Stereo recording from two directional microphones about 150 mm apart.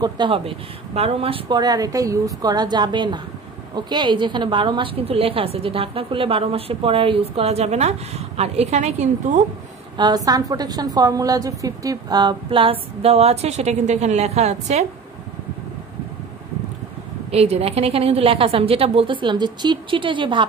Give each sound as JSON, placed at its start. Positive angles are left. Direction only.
{"t": 0.0, "sound": "a woman's voice", "side_deg": -35}
{"t": 1.5, "sound": "a woman's voice", "side_deg": -25}
{"t": 9.9, "sound": "a woman's voice", "side_deg": -25}
{"t": 17.3, "sound": "a woman's voice", "side_deg": -45}